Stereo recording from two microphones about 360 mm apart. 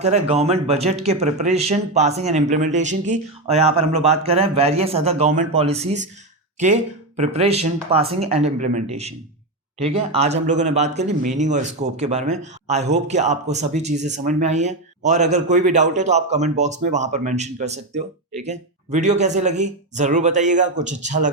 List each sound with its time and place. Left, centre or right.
0.0 s a man's voice: centre